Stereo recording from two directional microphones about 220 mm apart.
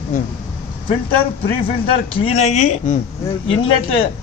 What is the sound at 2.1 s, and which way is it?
Speech, 25° left (ahead or behind).